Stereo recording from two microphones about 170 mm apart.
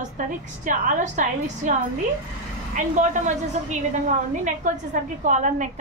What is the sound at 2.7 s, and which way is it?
Speech, 45° right (ahead or behind).